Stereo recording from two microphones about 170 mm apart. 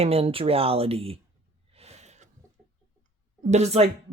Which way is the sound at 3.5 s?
40° right (ahead or behind).